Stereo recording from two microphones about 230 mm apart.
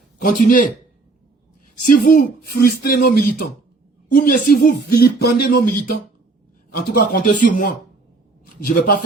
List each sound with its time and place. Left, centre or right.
0.2 s speech: left
1.9 s speech: left